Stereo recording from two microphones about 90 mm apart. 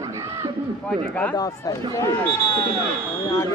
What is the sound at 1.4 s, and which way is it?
Speech, 40° left (ahead or behind).